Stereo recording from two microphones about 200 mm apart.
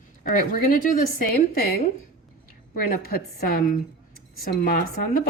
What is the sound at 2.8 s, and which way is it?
Speech, 50° left (ahead or behind).